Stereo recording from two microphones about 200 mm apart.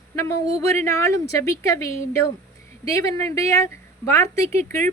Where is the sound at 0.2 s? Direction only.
15° left (ahead or behind).